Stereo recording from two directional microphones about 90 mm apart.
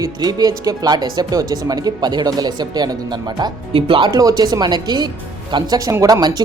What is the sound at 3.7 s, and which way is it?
Speech, 90° right.